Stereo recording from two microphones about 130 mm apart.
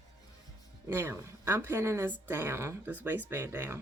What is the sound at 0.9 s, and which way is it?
Speech, 20° right (ahead or behind).